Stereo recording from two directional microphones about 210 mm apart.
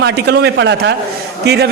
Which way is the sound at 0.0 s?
55° right (ahead or behind).